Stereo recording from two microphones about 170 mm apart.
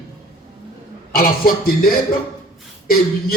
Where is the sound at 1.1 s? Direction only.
60° left (ahead or behind).